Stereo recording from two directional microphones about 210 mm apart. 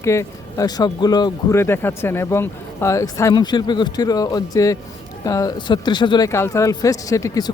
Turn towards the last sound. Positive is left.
turn(degrees=15)  # may be behind; listen again after turning